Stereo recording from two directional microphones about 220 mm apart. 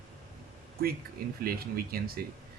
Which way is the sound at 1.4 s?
45° right (ahead or behind).